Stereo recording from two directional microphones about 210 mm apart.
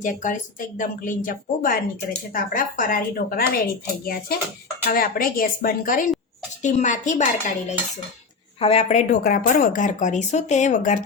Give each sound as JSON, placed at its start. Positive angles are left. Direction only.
{"t": 0.0, "sound": "a woman's voice", "side_deg": 35}